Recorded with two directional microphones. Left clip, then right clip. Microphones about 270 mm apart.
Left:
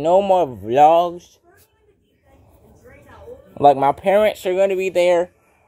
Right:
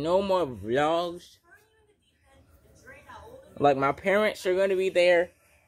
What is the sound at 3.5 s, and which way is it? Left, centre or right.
Speech, left.